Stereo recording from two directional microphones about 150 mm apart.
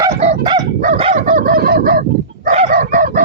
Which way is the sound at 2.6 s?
65° right (ahead or behind).